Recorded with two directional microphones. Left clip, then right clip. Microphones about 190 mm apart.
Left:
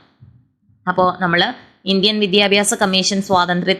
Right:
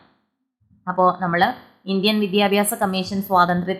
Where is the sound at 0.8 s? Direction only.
20° left (ahead or behind).